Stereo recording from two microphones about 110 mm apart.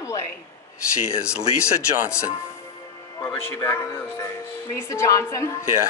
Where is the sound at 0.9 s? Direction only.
10° right (ahead or behind).